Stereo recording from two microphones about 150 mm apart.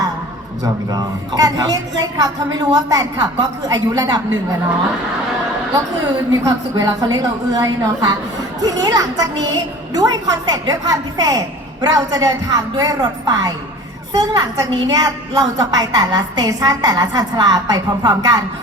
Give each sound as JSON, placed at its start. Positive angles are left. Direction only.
{"t": 0.6, "sound": "a woman's voice", "side_deg": -25}
{"t": 6.4, "sound": "a woman's voice", "side_deg": -25}